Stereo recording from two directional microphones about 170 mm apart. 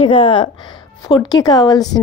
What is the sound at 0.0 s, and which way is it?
A woman's voice, 30° left (ahead or behind).